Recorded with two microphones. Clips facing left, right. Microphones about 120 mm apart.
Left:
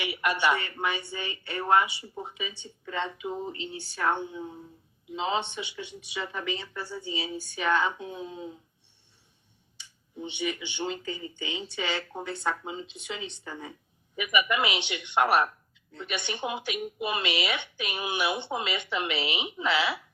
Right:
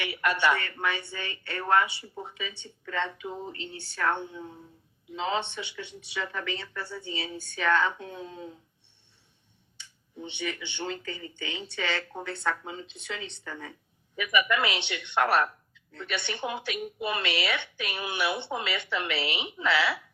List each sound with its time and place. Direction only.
0.0 s speech: 15° left (ahead or behind)
9.7 s speech: 15° left (ahead or behind)